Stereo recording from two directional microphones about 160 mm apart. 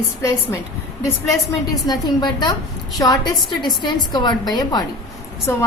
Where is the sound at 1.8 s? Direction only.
25° left (ahead or behind).